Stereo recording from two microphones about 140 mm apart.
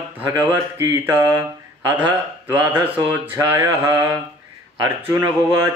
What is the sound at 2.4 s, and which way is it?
Music, 15° right (ahead or behind).